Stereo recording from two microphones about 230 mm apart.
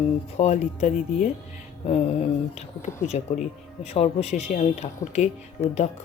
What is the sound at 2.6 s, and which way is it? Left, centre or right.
Speech, left.